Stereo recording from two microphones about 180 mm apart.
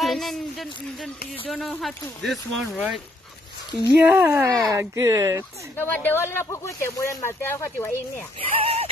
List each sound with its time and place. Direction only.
0.0 s a sound: centre (ahead or behind)
1.5 s speech: centre (ahead or behind); by 5.4 s 15° right (ahead or behind)
5.8 s speech: 10° left (ahead or behind)
8.4 s speech: 30° right (ahead or behind)